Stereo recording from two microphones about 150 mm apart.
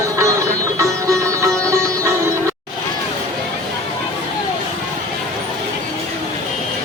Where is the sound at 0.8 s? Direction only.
20° right (ahead or behind).